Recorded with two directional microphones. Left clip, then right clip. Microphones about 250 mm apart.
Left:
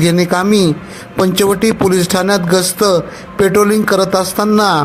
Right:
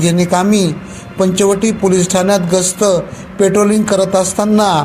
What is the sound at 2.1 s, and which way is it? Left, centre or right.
A man's voice, left.